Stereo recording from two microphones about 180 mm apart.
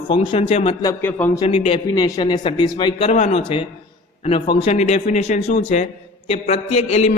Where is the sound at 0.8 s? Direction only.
15° left (ahead or behind).